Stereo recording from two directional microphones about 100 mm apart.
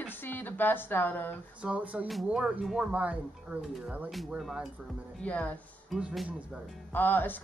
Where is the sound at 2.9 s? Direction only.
15° right (ahead or behind).